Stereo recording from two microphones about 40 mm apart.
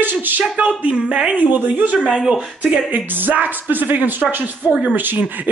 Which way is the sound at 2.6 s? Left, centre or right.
Right.